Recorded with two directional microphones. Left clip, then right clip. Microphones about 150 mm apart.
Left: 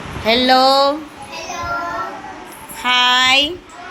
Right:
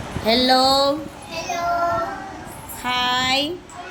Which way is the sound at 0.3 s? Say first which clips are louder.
Left 4 dB; centre (ahead or behind).